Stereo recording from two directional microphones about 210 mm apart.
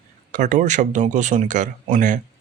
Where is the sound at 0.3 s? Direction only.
35° right (ahead or behind).